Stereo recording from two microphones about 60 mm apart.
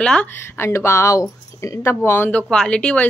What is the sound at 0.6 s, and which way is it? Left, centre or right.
Speech, left.